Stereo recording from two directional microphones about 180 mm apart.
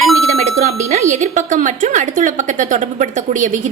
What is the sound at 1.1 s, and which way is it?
A woman's voice, 45° right (ahead or behind).